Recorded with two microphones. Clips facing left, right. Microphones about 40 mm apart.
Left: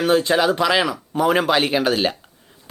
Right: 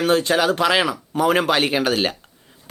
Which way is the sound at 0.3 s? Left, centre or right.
Centre.